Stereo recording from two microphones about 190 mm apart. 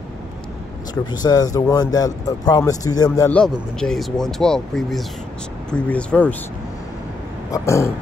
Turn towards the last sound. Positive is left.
turn(degrees=15)  # may be behind; listen again after turning